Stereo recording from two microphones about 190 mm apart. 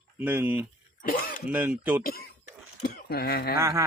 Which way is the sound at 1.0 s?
50° left (ahead or behind).